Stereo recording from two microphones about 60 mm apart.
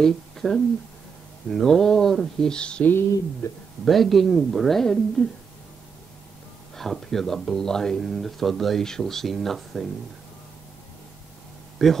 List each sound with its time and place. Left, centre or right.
0.0 s speech: centre
2.8 s speech: left
3.8 s speech: centre
6.8 s speech: centre
11.8 s speech: centre